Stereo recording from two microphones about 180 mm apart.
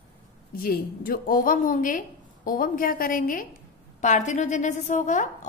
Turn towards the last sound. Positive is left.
turn(degrees=45)  # may be behind; listen again after turning